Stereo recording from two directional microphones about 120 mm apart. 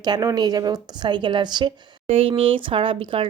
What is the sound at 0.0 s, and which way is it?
Speech, 30° right (ahead or behind).